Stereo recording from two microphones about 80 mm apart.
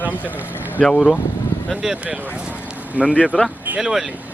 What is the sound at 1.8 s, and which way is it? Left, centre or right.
Speech, centre.